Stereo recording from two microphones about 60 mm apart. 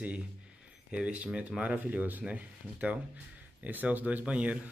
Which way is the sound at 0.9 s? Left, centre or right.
Right.